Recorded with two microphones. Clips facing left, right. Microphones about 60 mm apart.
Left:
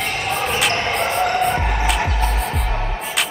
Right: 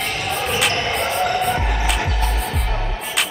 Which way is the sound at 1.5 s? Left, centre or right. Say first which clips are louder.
Left 1 dB; left.